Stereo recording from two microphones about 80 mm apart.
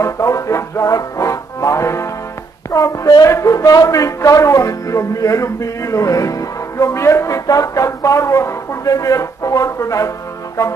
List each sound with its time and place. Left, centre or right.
0.0 s music: left
2.7 s a man's voice: left